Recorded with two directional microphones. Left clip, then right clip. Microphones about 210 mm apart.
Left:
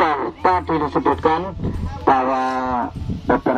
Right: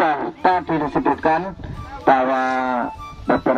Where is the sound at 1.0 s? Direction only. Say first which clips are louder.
Even; 30° right (ahead or behind).